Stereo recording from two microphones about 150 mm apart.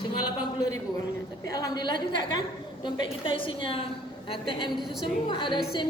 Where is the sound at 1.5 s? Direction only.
25° left (ahead or behind).